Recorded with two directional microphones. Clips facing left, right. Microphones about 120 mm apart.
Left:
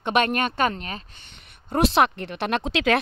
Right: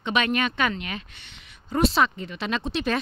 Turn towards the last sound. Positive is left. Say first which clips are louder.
# left 4 dB
turn(degrees=90)